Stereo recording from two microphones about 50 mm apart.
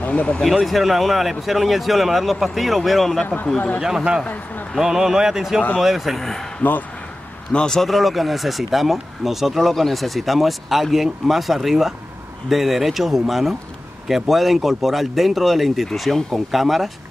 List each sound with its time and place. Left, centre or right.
0.1 s speech: left
0.7 s speech: centre
3.5 s speech: left
3.8 s speech: centre
7.5 s speech: centre
7.8 s speech: centre